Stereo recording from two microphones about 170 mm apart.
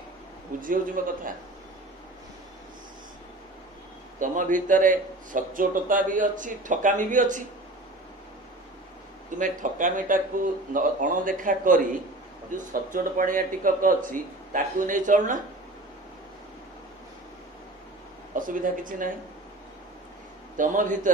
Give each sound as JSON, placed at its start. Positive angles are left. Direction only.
{"t": 0.6, "sound": "speech", "side_deg": -55}
{"t": 4.2, "sound": "speech", "side_deg": -50}
{"t": 9.3, "sound": "speech", "side_deg": -50}
{"t": 18.3, "sound": "speech", "side_deg": -50}
{"t": 20.5, "sound": "speech", "side_deg": -50}